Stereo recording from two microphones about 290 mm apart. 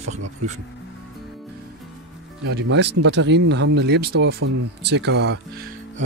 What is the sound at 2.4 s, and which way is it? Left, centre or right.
Speech, right.